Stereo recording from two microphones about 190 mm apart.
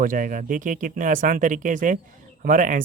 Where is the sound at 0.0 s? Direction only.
45° right (ahead or behind).